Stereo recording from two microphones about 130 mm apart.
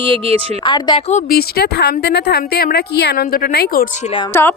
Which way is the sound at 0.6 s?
35° left (ahead or behind).